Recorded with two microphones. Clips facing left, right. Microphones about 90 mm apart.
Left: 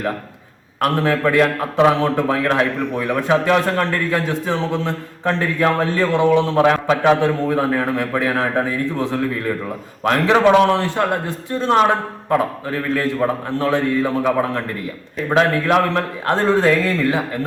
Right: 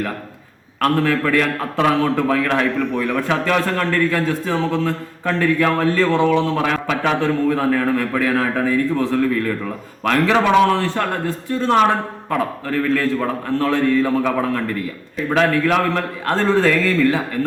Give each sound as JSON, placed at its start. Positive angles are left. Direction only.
{"t": 0.8, "sound": "a man's voice", "side_deg": 20}